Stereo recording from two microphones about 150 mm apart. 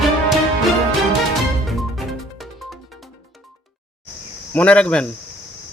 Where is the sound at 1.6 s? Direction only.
Centre (ahead or behind).